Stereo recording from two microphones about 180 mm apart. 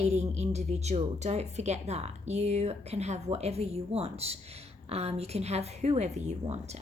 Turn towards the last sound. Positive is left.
turn(degrees=-40)  # may be behind; listen again after turning